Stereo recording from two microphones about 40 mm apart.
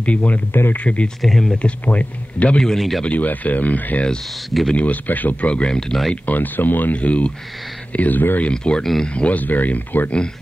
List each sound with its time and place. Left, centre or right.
0.0 s speech: left
0.5 s speech: left
0.7 s speech: left
1.2 s speech: centre
1.6 s speech: left
2.6 s speech: centre
3.1 s speech: left
5.5 s speech: left
6.2 s speech: left
7.0 s speech: left
7.9 s speech: left
8.5 s speech: left
9.4 s speech: left